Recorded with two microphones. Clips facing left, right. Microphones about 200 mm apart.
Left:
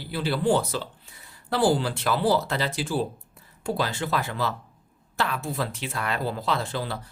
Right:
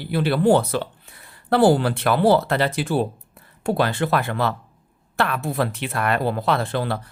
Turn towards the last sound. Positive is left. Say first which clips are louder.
# right 6 dB
turn(degrees=-60)  # may be behind; listen again after turning